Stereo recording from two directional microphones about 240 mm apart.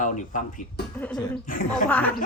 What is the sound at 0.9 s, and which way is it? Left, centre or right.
Speech, centre.